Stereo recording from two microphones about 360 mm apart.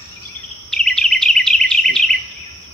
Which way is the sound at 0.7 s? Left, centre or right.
Centre.